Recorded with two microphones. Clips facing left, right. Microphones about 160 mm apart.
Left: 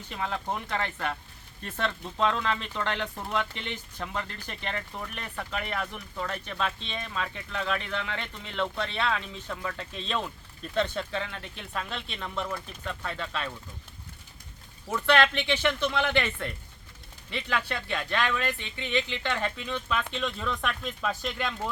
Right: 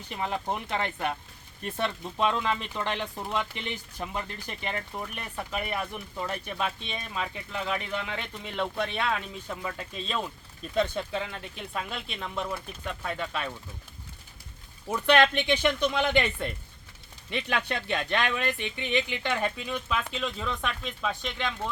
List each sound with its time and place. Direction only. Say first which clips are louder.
0.1 s speech: right 1 dB; 15° right (ahead or behind)
14.8 s speech: right 2 dB; 15° right (ahead or behind); by 21.7 s 5° left (ahead or behind)